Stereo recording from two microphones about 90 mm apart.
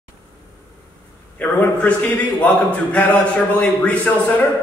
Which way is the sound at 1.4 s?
20° left (ahead or behind).